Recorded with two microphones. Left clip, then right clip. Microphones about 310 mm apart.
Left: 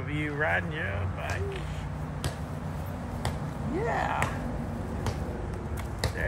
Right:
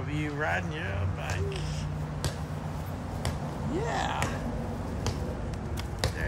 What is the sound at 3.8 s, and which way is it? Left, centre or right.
Speech, centre.